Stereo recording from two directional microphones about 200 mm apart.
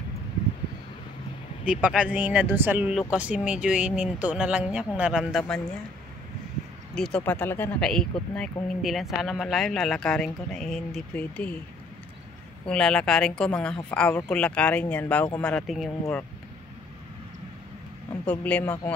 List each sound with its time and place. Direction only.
1.6 s speech: 5° right (ahead or behind)
7.0 s speech: 5° left (ahead or behind)
12.6 s speech: 5° left (ahead or behind)
18.2 s speech: 5° left (ahead or behind)